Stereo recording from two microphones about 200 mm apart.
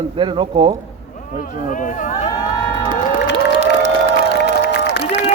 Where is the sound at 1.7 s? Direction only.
40° left (ahead or behind).